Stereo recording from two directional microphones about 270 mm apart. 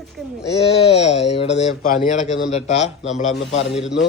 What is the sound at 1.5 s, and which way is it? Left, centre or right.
Speech, left.